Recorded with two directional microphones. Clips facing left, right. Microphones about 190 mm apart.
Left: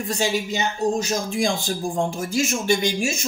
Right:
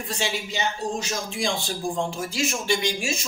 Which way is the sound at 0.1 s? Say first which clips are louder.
Left 6 dB; 45° left (ahead or behind).